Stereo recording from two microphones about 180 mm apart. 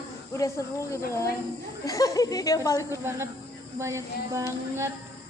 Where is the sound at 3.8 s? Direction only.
15° right (ahead or behind).